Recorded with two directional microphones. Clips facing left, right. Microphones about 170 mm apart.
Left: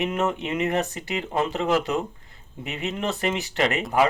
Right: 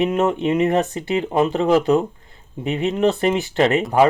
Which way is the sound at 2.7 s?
30° right (ahead or behind).